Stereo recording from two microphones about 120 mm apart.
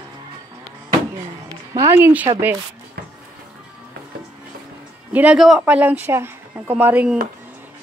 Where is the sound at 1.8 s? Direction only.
20° right (ahead or behind).